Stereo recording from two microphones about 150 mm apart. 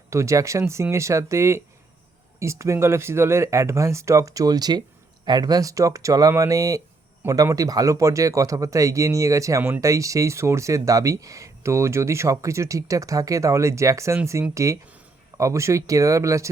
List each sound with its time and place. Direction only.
0.1 s speech: 20° right (ahead or behind)